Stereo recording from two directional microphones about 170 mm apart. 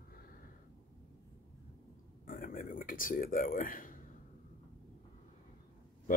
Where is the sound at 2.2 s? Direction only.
55° left (ahead or behind).